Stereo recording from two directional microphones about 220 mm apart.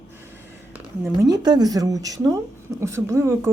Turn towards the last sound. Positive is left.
turn(degrees=-15)  # may be behind; listen again after turning